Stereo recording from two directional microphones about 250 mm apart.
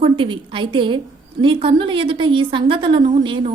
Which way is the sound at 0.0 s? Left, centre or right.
Centre.